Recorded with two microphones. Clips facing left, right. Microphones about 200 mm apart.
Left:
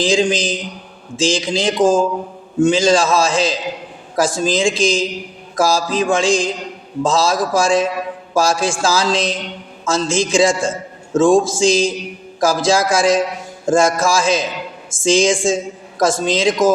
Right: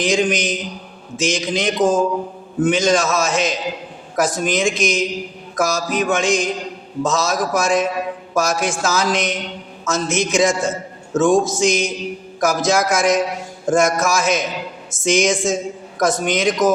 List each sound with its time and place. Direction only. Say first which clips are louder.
0.0 s a man's voice: left 2 dB; 30° left (ahead or behind)